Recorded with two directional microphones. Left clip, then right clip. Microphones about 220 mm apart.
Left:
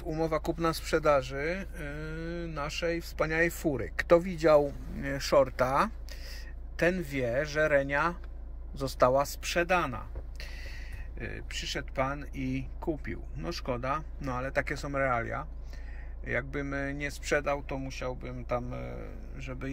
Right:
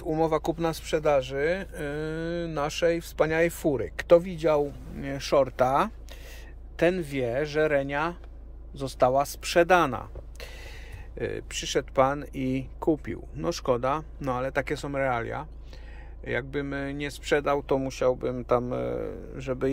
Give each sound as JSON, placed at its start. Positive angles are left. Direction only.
{"t": 0.0, "sound": "speech", "side_deg": -10}
{"t": 11.1, "sound": "speech", "side_deg": -20}